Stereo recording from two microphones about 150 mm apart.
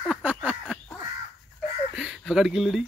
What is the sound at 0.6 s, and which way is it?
Crow, 5° left (ahead or behind).